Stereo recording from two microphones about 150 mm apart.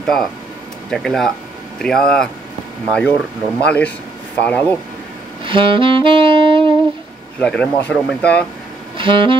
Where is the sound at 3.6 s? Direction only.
10° left (ahead or behind).